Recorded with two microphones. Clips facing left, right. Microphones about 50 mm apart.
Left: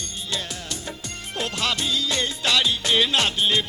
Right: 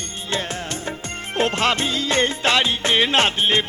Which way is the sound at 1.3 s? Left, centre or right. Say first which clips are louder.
Right 7 dB; right.